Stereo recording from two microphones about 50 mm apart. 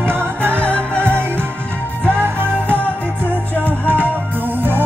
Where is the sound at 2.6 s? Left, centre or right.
Left.